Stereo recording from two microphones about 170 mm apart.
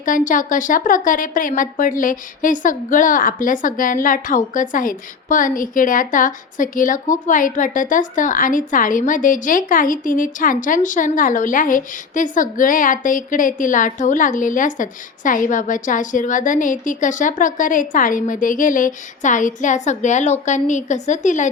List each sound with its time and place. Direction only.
0.0 s speech: 50° left (ahead or behind)